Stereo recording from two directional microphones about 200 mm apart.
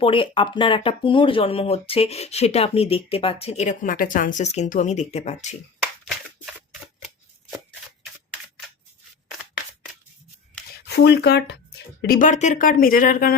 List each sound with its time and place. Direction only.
0.0 s speech: 25° left (ahead or behind)
10.8 s speech: 55° left (ahead or behind)